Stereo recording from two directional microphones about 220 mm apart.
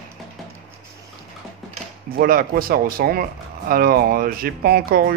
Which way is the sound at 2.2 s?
40° right (ahead or behind).